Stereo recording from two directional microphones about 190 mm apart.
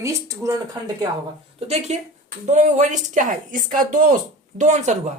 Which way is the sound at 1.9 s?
35° right (ahead or behind).